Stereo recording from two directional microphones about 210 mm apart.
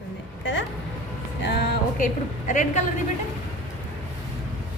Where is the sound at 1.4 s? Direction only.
45° left (ahead or behind).